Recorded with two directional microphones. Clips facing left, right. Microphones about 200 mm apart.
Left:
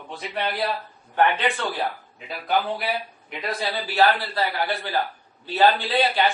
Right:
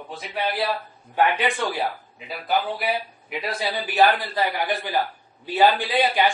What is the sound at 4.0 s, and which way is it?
A man's voice, 15° right (ahead or behind).